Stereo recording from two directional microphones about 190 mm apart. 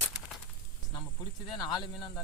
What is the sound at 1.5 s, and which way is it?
Speech, 25° left (ahead or behind).